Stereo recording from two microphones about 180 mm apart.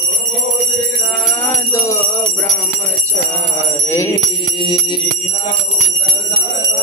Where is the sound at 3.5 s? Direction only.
15° left (ahead or behind).